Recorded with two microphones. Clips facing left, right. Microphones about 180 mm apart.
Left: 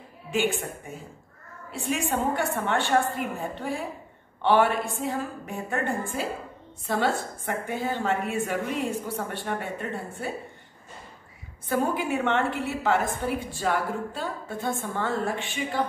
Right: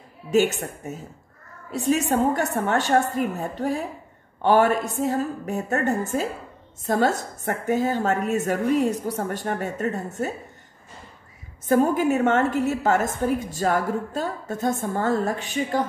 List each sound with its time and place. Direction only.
0.3 s a woman's voice: 40° right (ahead or behind)
11.6 s a woman's voice: 45° right (ahead or behind)